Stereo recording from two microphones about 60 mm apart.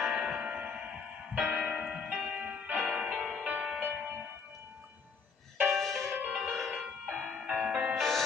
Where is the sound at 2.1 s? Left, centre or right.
Centre.